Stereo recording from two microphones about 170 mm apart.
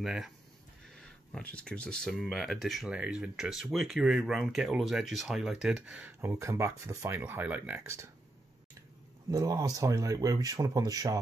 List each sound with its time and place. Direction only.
0.0 s speech: 5° right (ahead or behind)
9.3 s speech: 20° right (ahead or behind)